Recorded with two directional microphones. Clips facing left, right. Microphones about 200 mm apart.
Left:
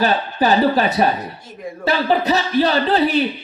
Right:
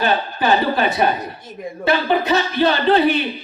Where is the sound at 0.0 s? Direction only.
35° left (ahead or behind).